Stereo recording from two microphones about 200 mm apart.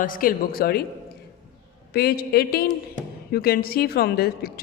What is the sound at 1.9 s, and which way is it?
A woman's voice, 50° left (ahead or behind).